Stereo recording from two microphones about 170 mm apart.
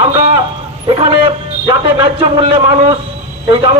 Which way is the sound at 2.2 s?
30° right (ahead or behind).